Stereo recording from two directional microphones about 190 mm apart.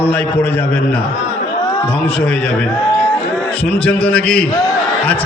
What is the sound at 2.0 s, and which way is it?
Speech, 5° left (ahead or behind).